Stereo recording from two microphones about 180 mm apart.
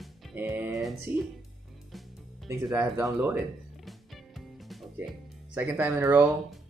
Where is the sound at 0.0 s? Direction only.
Centre (ahead or behind).